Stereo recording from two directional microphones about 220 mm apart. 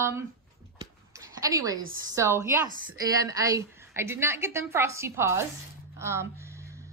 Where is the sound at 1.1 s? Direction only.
15° right (ahead or behind).